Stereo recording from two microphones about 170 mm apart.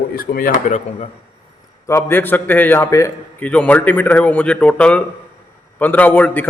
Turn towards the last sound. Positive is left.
turn(degrees=10)  # may be behind; listen again after turning